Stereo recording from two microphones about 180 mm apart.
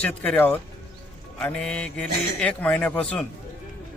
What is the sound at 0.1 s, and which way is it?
A man's voice, 10° left (ahead or behind).